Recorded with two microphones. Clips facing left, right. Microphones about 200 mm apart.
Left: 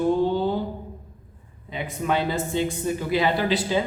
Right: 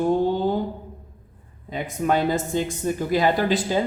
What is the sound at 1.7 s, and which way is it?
Speech, 45° right (ahead or behind).